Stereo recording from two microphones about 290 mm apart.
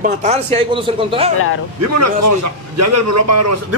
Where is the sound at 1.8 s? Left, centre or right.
Right.